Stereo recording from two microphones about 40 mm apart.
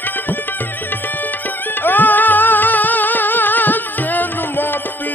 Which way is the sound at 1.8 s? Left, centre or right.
Left.